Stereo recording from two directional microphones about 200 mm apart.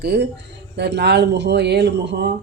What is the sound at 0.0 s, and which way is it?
Speech, 55° right (ahead or behind).